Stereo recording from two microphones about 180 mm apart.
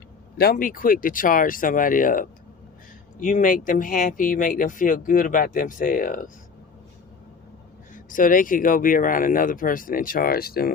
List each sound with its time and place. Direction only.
0.3 s speech: 50° left (ahead or behind)
7.9 s speech: 50° left (ahead or behind)